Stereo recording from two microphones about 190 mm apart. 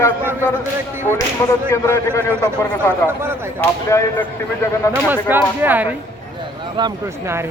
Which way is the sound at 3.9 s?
15° left (ahead or behind).